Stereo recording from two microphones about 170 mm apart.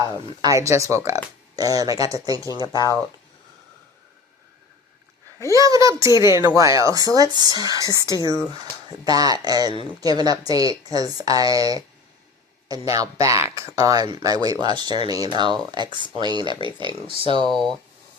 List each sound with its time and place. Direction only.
0.4 s speech: 20° right (ahead or behind)
2.6 s speech: 20° left (ahead or behind)
5.5 s speech: 20° right (ahead or behind)
7.8 s speech: 20° left (ahead or behind)
8.5 s speech: 25° right (ahead or behind)
17.5 s speech: centre (ahead or behind)